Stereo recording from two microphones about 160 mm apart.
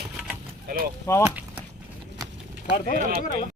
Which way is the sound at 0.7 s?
65° right (ahead or behind).